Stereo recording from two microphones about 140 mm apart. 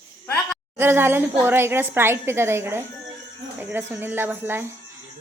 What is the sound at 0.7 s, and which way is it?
A woman's voice, 15° right (ahead or behind).